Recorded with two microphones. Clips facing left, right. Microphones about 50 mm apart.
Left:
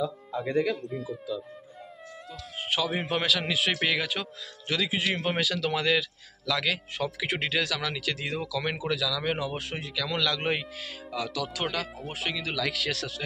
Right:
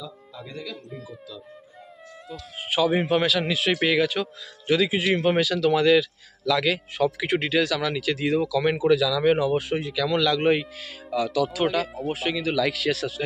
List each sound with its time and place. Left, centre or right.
0.0 s speech: left
0.8 s speech: centre
2.3 s speech: centre
4.6 s speech: centre
5.4 s speech: centre